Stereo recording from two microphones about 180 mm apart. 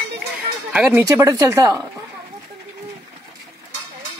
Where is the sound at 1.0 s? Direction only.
15° right (ahead or behind).